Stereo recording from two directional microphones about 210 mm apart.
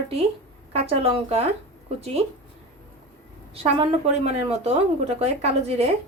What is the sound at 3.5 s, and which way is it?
A woman's voice, 30° right (ahead or behind).